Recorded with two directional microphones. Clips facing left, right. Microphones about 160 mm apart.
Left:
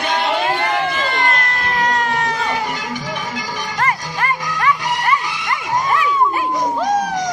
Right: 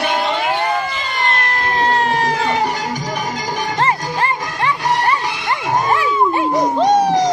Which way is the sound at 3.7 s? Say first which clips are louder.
Right 2 dB; 30° right (ahead or behind).